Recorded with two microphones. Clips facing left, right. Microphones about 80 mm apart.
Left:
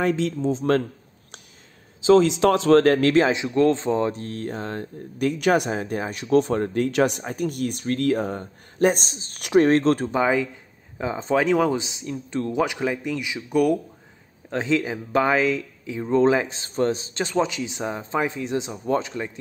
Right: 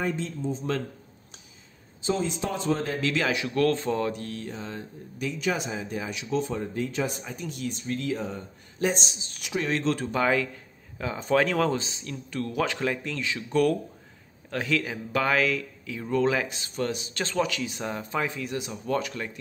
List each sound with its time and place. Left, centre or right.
0.0 s speech: left
2.0 s speech: left
3.2 s speech: left
4.4 s speech: left
10.1 s speech: centre
17.2 s speech: centre